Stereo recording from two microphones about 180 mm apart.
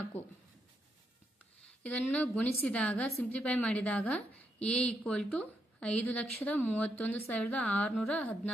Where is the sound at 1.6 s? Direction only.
5° left (ahead or behind).